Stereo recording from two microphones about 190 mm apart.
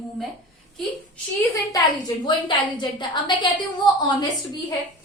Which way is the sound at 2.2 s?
25° left (ahead or behind).